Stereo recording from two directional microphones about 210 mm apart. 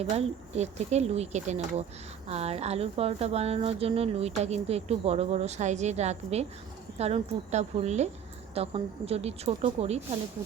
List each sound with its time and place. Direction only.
0.0 s a woman's voice: 30° right (ahead or behind)